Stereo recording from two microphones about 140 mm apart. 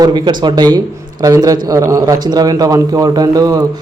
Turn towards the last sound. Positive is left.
turn(degrees=-25)  # may be behind; listen again after turning